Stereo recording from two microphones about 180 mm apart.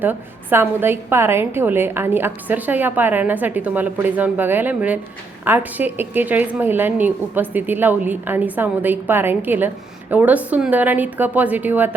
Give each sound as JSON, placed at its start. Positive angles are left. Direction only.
{"t": 0.0, "sound": "a woman's voice", "side_deg": -10}